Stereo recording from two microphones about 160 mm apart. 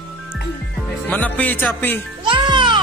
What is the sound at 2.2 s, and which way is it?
Music, 30° right (ahead or behind).